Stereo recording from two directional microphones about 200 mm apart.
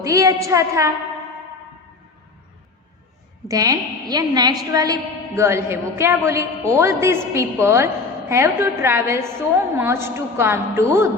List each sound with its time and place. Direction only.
0.0 s a woman's voice: 15° right (ahead or behind)
3.5 s a woman's voice: 15° right (ahead or behind)